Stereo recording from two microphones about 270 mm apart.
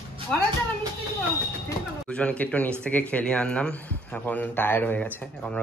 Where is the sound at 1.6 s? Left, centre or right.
Centre.